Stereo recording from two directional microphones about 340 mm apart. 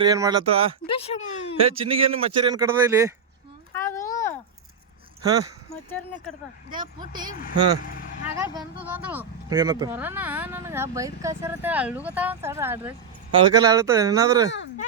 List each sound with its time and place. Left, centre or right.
0.0 s speech: centre
0.9 s a sound: centre
1.5 s speech: centre
3.8 s a sound: centre
5.2 s speech: centre
7.9 s vehicle: left
8.4 s speech: centre